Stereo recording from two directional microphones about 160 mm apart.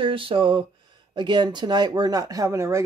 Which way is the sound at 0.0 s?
35° right (ahead or behind).